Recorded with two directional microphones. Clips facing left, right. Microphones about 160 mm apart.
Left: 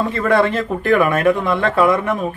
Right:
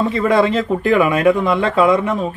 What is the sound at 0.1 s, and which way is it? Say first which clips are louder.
Speech: right 1 dB; 15° right (ahead or behind).